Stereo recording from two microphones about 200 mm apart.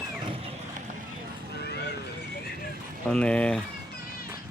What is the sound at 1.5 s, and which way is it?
Horse, 55° left (ahead or behind).